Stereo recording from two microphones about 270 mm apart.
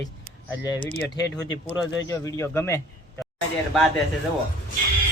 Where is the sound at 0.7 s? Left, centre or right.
Centre.